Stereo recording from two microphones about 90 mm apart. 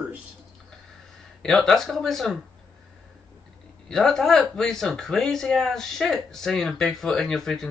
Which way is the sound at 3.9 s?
5° left (ahead or behind).